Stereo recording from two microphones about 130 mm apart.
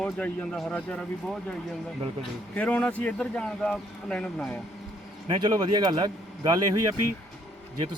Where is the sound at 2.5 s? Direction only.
10° left (ahead or behind).